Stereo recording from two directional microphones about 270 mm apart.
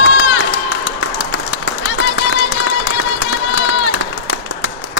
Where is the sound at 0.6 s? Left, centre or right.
Left.